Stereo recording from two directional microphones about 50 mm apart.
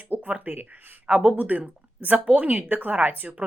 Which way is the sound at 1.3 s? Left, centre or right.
Right.